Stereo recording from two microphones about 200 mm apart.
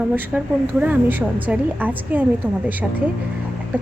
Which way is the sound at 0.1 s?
5° right (ahead or behind).